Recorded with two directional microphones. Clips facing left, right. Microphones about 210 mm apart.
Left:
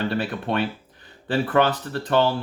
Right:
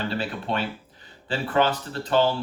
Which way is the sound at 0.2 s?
55° left (ahead or behind).